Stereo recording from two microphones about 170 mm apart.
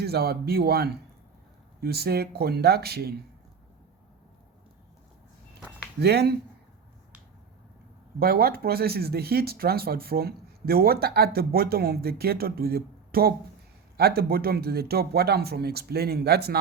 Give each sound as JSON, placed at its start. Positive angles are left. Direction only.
{"t": 0.0, "sound": "speech", "side_deg": -65}
{"t": 6.0, "sound": "speech", "side_deg": -70}
{"t": 8.2, "sound": "speech", "side_deg": -60}